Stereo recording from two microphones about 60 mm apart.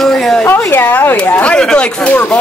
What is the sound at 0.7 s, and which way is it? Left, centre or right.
Speech, left.